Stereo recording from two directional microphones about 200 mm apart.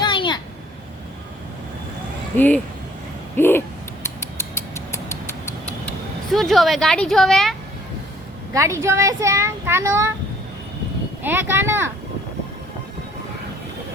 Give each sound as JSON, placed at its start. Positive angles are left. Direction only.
{"t": 0.0, "sound": "a sound", "side_deg": 25}
{"t": 3.3, "sound": "a sound", "side_deg": 10}
{"t": 4.0, "sound": "creak", "side_deg": 15}
{"t": 6.3, "sound": "speech", "side_deg": 0}
{"t": 8.5, "sound": "a child's voice", "side_deg": -15}
{"t": 11.2, "sound": "a child's voice", "side_deg": -10}